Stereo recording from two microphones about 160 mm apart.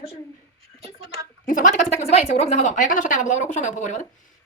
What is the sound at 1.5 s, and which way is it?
A woman's voice, 55° left (ahead or behind).